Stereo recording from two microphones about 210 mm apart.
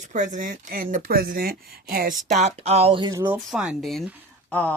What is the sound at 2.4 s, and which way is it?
Speech, 30° right (ahead or behind).